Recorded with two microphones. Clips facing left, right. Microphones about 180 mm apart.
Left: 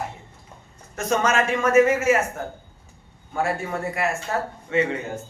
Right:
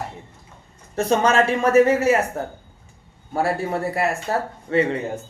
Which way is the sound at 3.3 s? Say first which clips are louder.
Right 3 dB; 35° right (ahead or behind).